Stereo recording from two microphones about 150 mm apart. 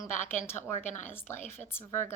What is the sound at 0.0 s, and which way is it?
A woman's voice, 15° left (ahead or behind).